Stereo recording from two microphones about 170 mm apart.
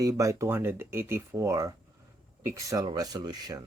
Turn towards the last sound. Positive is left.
turn(degrees=-25)  # may be behind; listen again after turning